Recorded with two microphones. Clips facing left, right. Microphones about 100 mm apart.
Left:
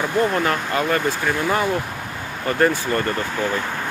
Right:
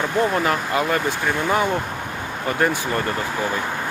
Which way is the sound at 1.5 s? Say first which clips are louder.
Right 1 dB; 20° right (ahead or behind).